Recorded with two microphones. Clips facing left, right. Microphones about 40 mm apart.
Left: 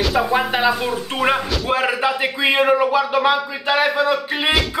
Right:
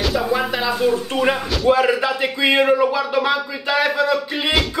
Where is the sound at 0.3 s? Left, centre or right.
Left.